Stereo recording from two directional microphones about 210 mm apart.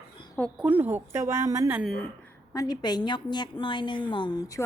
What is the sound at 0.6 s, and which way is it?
A woman's voice, 5° right (ahead or behind).